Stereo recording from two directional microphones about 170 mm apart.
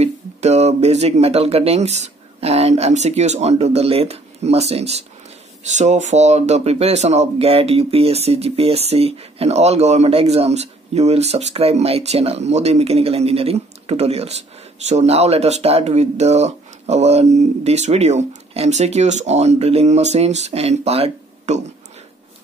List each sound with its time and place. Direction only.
0.0 s speech: 40° right (ahead or behind)